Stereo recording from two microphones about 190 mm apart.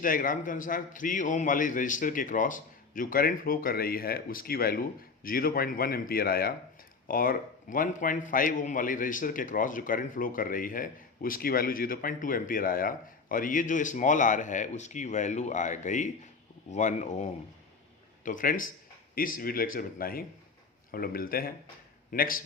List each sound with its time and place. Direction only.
0.0 s a man's voice: 45° left (ahead or behind)